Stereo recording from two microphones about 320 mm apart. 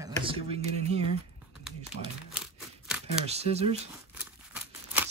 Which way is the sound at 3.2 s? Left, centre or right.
Centre.